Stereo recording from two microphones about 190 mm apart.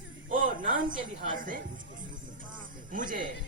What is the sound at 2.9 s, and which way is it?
Speech, 45° right (ahead or behind).